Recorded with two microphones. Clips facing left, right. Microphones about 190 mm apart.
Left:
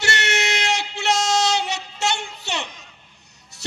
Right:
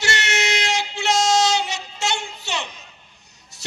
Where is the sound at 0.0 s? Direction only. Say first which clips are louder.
Even; 60° left (ahead or behind).